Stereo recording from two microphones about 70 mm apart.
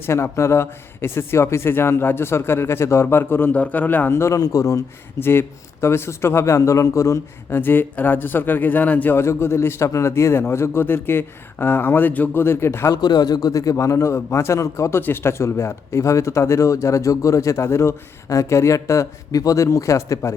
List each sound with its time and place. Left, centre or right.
0.0 s a man's voice: left
4.1 s a man's voice: left
5.2 s a man's voice: left
7.5 s speech: left
9.1 s a man's voice: left
12.9 s a man's voice: left